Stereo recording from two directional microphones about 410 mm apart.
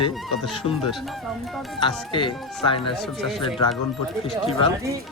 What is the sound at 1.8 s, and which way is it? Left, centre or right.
Speech, centre.